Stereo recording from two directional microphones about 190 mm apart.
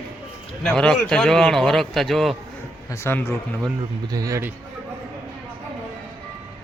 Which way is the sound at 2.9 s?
10° left (ahead or behind).